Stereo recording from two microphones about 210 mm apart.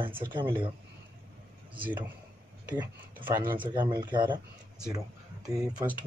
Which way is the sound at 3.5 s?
20° right (ahead or behind).